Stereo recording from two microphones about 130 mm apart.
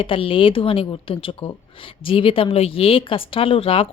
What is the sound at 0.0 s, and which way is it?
Speech, 45° left (ahead or behind).